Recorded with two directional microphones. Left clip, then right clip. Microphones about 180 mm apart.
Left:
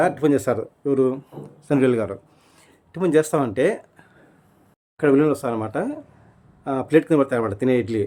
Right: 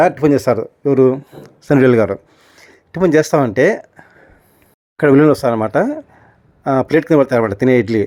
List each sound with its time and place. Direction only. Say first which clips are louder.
0.0 s speech: right 7 dB; 30° right (ahead or behind)
2.6 s a sound: right 9 dB; 35° right (ahead or behind)
4.9 s speech: right 7 dB; 45° right (ahead or behind)